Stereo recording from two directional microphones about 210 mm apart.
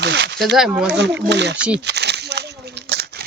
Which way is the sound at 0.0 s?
55° right (ahead or behind).